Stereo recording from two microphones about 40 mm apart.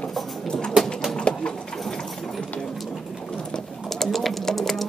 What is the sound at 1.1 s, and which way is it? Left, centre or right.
Pigeon, left.